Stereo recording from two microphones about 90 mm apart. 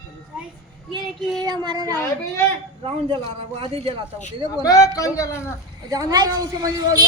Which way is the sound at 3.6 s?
85° right.